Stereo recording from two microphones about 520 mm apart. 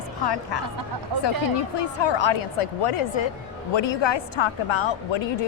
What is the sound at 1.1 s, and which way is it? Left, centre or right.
Speech, right.